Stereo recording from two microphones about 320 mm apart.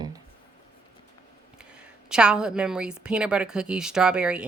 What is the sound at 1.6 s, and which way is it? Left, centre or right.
A woman's voice, centre.